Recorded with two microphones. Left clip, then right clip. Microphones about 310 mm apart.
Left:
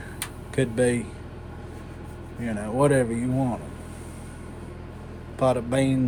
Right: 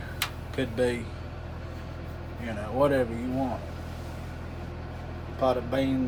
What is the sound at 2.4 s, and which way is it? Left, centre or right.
Speech, left.